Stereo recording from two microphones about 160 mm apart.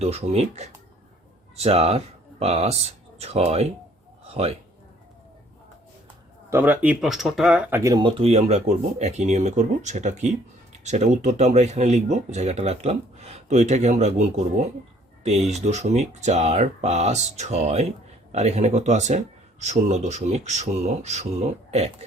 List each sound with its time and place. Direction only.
0.0 s speech: 40° right (ahead or behind)
6.5 s speech: 10° right (ahead or behind)
7.7 s speech: 20° right (ahead or behind)
8.0 s speech: 40° right (ahead or behind)